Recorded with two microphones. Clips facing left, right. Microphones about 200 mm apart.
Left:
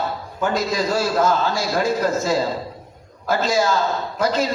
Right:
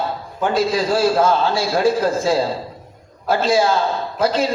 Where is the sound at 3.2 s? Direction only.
30° right (ahead or behind).